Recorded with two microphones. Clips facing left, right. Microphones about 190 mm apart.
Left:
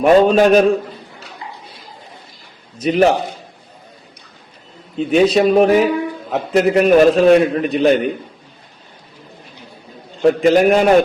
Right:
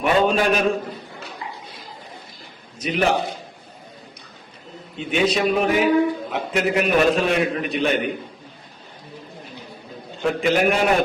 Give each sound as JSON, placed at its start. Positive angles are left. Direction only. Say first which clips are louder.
{"t": 0.0, "sound": "a man's voice", "louder": "left 8 dB", "side_deg": 40}
{"t": 2.8, "sound": "a man's voice", "louder": "left 7 dB", "side_deg": 35}
{"t": 4.9, "sound": "a man's voice", "louder": "left 8 dB", "side_deg": 35}
{"t": 10.2, "sound": "a man's voice", "louder": "left 8 dB", "side_deg": 40}